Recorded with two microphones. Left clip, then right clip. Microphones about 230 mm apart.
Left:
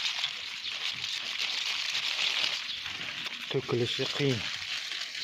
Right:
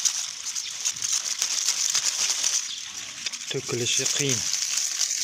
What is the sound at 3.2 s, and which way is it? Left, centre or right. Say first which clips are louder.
Speech: right 5 dB; centre.